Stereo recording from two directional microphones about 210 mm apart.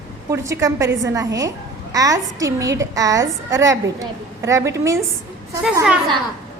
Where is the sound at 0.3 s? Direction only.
15° right (ahead or behind).